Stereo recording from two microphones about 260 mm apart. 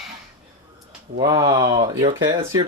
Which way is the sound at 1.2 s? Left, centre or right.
Centre.